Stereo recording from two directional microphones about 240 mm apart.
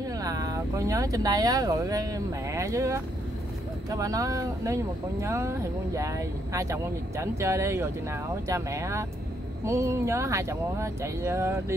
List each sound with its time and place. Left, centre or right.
0.2 s speech: centre